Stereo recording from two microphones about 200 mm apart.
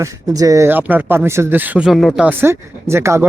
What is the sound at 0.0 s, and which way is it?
Speech, 15° right (ahead or behind).